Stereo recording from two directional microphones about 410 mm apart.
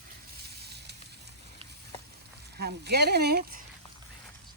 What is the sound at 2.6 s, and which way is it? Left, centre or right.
Speech, right.